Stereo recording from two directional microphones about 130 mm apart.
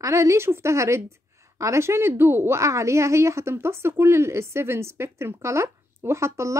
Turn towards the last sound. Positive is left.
turn(degrees=-20)  # may be behind; listen again after turning